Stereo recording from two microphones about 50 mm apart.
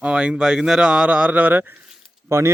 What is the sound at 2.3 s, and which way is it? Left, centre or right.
Speech, right.